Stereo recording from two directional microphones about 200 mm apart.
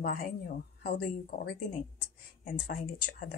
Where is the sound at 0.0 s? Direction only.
45° left (ahead or behind).